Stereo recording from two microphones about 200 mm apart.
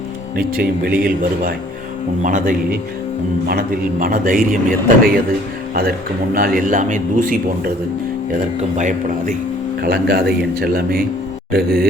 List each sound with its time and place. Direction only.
0.3 s a man's voice: 50° right (ahead or behind)
4.0 s a man's voice: 45° right (ahead or behind)
6.3 s a man's voice: 45° right (ahead or behind)
9.8 s a man's voice: 50° right (ahead or behind)